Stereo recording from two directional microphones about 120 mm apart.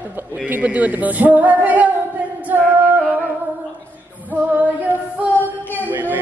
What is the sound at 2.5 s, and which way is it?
Music, 20° right (ahead or behind).